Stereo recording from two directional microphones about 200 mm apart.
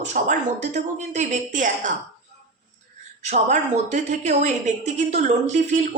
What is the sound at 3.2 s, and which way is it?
A woman's voice, 35° right (ahead or behind).